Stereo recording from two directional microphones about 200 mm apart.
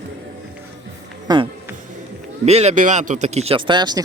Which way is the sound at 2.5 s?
35° right (ahead or behind).